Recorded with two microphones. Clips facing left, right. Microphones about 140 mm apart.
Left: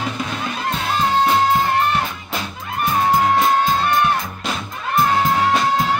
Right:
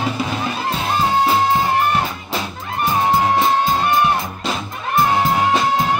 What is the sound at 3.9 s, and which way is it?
Music, 15° right (ahead or behind).